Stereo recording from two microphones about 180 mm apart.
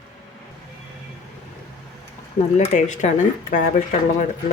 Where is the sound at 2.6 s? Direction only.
40° left (ahead or behind).